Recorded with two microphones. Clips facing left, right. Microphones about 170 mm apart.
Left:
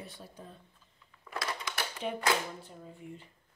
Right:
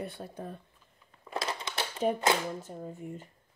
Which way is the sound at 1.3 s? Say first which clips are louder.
Right 3 dB; 25° right (ahead or behind).